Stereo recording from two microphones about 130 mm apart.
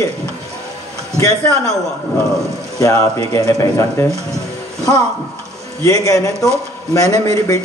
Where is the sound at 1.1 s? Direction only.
25° left (ahead or behind).